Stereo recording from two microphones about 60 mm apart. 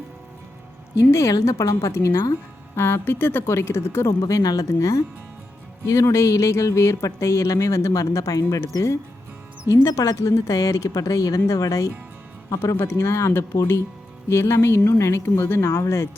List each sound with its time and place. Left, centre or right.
0.9 s speech: left
2.7 s a woman's voice: left
4.2 s speech: left
9.7 s speech: right
10.2 s speech: left
12.7 s speech: left